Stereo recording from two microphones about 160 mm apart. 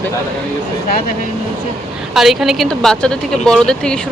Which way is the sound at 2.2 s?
Centre (ahead or behind).